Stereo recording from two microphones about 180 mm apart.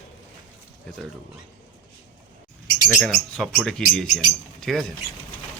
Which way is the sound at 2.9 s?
Centre (ahead or behind).